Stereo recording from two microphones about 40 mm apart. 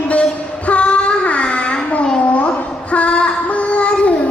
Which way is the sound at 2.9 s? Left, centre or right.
Left.